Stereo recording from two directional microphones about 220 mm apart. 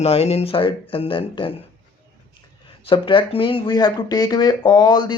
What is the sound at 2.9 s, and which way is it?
Speech, 25° left (ahead or behind).